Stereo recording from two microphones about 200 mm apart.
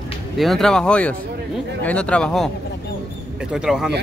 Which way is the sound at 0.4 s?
Centre (ahead or behind).